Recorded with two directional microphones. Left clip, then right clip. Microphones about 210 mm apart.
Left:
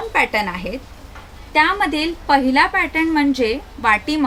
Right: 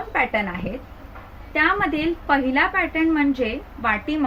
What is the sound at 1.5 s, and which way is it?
A woman's voice, 50° left (ahead or behind).